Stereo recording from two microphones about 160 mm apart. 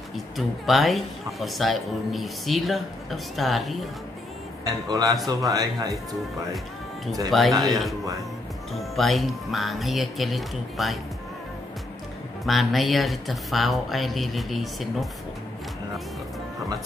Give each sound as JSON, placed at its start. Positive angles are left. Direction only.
{"t": 0.1, "sound": "speech", "side_deg": 0}
{"t": 4.6, "sound": "a man's voice", "side_deg": -25}
{"t": 7.2, "sound": "speech", "side_deg": 0}
{"t": 12.4, "sound": "speech", "side_deg": 0}